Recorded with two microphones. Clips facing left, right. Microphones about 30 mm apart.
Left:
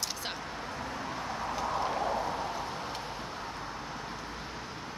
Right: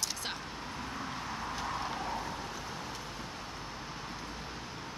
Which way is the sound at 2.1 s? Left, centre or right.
Left.